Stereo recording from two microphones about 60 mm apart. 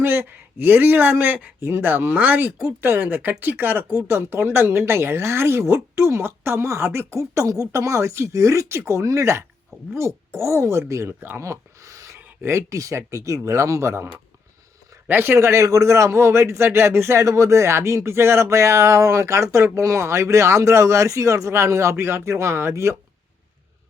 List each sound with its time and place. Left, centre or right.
0.0 s speech: right
2.6 s speech: right
9.9 s speech: right
11.3 s a sound: right
12.1 s speech: right
15.0 s a man's voice: right
15.4 s speech: right